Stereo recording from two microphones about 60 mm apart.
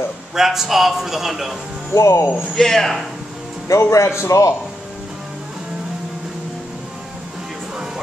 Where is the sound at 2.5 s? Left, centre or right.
Centre.